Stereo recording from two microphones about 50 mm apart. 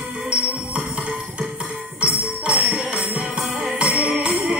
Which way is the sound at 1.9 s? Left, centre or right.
Right.